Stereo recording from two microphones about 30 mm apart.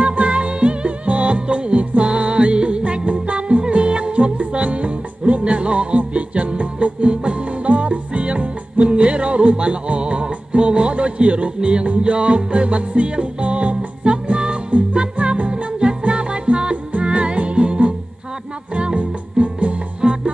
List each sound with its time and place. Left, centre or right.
0.0 s music: right
8.9 s music: right
14.0 s music: right
15.2 s music: right
15.5 s music: right
20.0 s music: right